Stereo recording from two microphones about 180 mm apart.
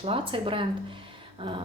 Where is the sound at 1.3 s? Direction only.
30° right (ahead or behind).